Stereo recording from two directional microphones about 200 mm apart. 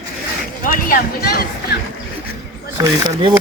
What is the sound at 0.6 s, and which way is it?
Speech, 45° left (ahead or behind).